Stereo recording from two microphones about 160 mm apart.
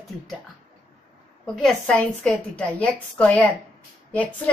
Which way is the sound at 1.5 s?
5° left (ahead or behind).